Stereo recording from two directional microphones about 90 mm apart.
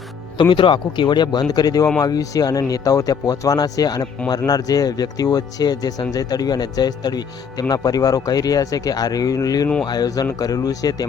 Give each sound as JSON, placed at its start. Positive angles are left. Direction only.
{"t": 0.3, "sound": "speech", "side_deg": 65}